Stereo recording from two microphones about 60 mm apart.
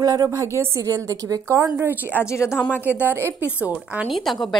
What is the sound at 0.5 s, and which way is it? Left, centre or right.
A woman's voice, right.